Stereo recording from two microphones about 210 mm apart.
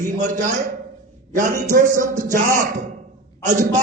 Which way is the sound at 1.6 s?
40° right (ahead or behind).